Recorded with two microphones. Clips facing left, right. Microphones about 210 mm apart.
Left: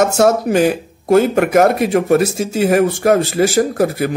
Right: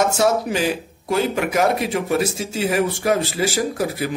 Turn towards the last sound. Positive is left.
turn(degrees=55)  # may be behind; listen again after turning